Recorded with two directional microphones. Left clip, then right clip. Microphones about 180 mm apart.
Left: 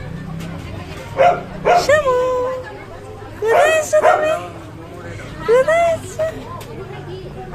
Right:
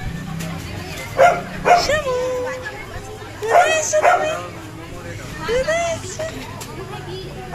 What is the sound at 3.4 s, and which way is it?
Speech, 55° left (ahead or behind).